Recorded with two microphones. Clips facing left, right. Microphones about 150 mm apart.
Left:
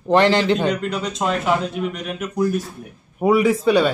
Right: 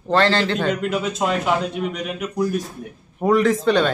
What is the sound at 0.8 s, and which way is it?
A man's voice, 5° right (ahead or behind).